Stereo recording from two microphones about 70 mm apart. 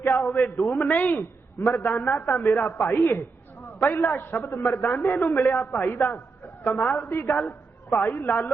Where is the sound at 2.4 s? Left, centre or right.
Left.